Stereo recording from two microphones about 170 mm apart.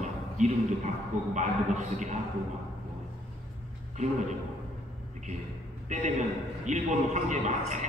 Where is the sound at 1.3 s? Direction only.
45° right (ahead or behind).